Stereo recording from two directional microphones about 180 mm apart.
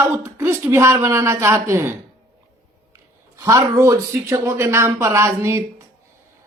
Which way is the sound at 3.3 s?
15° right (ahead or behind).